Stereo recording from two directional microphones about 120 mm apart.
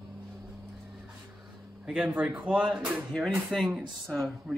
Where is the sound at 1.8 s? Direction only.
10° right (ahead or behind).